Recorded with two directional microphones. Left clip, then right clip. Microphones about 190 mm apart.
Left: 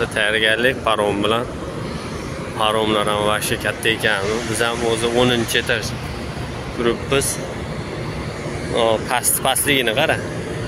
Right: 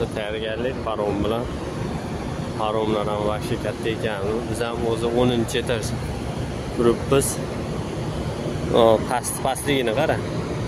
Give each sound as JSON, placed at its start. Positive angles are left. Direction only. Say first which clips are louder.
{"t": 0.1, "sound": "speech", "louder": "left 10 dB", "side_deg": 5}
{"t": 2.6, "sound": "speech", "louder": "left 5 dB", "side_deg": 0}
{"t": 5.5, "sound": "speech", "louder": "left 5 dB", "side_deg": -15}
{"t": 6.8, "sound": "speech", "louder": "even", "side_deg": -25}
{"t": 8.7, "sound": "speech", "louder": "right 2 dB", "side_deg": -35}
{"t": 9.1, "sound": "speech", "louder": "left 4 dB", "side_deg": -10}